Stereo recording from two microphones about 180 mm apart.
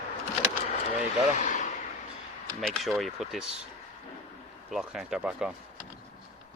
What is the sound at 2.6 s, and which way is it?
Speech, centre (ahead or behind).